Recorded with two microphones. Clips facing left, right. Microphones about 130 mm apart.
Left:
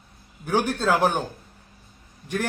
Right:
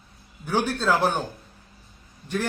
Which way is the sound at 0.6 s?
15° left (ahead or behind).